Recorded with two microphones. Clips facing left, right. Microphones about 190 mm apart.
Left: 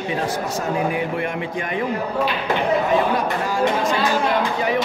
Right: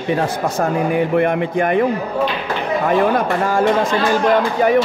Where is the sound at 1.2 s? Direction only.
55° right (ahead or behind).